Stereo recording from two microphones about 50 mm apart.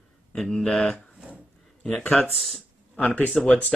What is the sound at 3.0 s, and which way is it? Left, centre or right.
Speech, left.